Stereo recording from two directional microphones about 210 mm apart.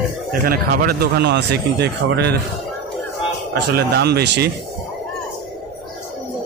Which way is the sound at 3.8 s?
50° right (ahead or behind).